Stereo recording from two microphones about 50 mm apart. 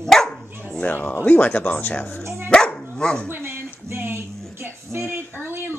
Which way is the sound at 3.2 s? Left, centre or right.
Right.